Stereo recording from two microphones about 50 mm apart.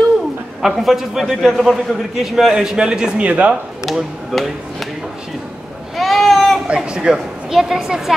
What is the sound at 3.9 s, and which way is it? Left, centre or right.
Speech, centre.